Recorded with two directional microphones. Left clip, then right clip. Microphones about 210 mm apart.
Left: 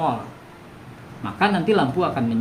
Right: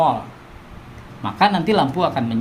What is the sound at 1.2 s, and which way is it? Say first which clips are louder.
Speech: right 3 dB; 55° right (ahead or behind).